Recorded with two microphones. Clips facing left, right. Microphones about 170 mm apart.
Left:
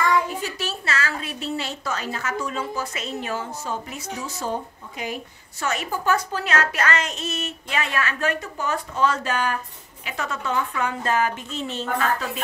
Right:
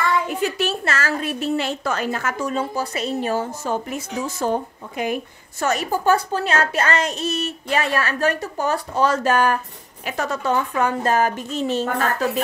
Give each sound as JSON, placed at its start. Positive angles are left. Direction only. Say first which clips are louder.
{"t": 0.3, "sound": "a sound", "louder": "right 7 dB", "side_deg": -60}
{"t": 2.5, "sound": "speech", "louder": "right 5 dB", "side_deg": -35}
{"t": 3.6, "sound": "a woman's voice", "louder": "right 6 dB", "side_deg": -55}